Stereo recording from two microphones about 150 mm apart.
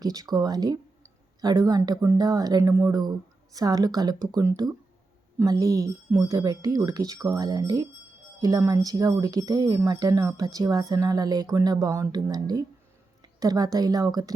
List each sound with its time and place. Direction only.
0.0 s speech: 25° right (ahead or behind)